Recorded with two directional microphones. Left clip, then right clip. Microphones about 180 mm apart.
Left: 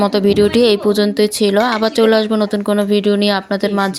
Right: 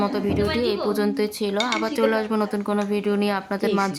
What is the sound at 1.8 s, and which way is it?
Speech, 25° left (ahead or behind).